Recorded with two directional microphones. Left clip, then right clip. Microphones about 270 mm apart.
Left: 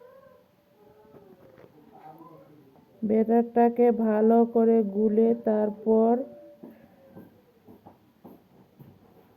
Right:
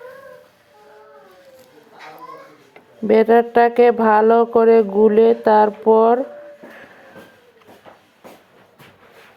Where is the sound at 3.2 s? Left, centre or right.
Right.